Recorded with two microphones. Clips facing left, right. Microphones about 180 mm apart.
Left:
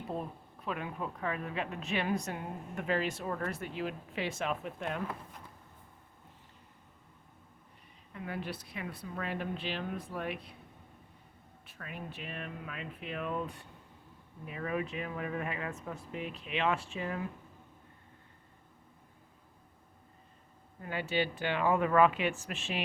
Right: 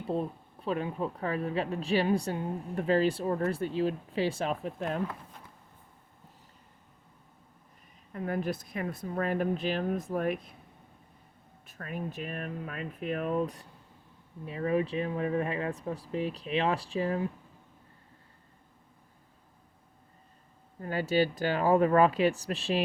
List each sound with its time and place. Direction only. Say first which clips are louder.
0.6 s a woman's voice: right 6 dB; 30° right (ahead or behind)
8.1 s speech: right 7 dB; 45° right (ahead or behind)
11.6 s a woman's voice: right 7 dB; 45° right (ahead or behind)
20.8 s a woman's voice: right 6 dB; 40° right (ahead or behind)